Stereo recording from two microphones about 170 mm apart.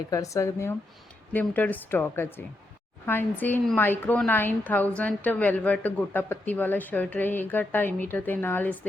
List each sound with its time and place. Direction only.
0.1 s a woman's voice: 20° left (ahead or behind)